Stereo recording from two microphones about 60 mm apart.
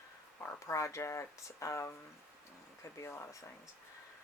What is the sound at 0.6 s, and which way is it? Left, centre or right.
Speech, left.